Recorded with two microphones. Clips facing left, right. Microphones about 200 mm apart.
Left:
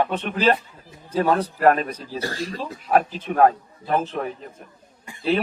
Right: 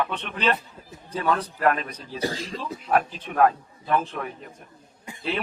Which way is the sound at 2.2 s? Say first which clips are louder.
Even; 20° right (ahead or behind).